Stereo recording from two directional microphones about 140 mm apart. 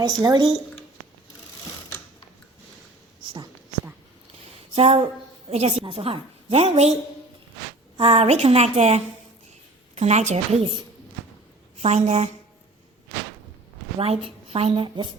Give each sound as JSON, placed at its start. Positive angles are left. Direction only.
{"t": 0.0, "sound": "speech", "side_deg": -30}
{"t": 3.2, "sound": "speech", "side_deg": -30}
{"t": 4.7, "sound": "a woman's voice", "side_deg": -45}
{"t": 7.9, "sound": "a woman's voice", "side_deg": -45}
{"t": 11.8, "sound": "a woman's voice", "side_deg": -50}
{"t": 14.0, "sound": "a woman's voice", "side_deg": -45}